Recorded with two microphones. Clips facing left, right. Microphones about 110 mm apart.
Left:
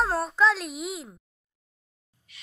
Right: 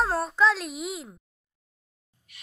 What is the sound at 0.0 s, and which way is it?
A child's voice, centre (ahead or behind).